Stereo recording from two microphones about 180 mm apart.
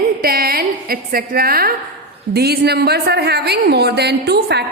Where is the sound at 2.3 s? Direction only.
60° right (ahead or behind).